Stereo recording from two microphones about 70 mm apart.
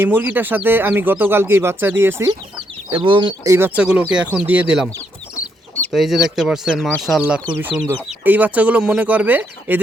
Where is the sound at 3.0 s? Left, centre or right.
Right.